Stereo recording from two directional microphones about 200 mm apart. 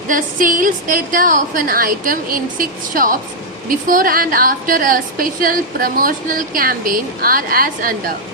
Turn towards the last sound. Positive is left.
turn(degrees=-45)  # may be behind; listen again after turning